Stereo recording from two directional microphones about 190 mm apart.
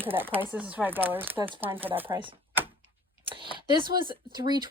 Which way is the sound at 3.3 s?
25° right (ahead or behind).